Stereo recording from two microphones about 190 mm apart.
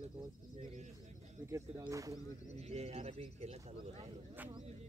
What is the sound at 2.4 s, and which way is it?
Speech, 35° right (ahead or behind).